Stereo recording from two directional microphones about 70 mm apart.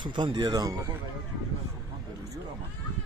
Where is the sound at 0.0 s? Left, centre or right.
Right.